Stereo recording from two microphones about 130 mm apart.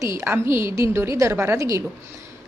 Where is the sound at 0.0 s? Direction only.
20° right (ahead or behind).